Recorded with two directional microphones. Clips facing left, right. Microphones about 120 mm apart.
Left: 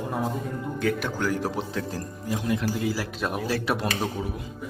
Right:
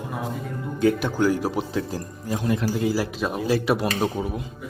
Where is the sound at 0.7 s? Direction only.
20° right (ahead or behind).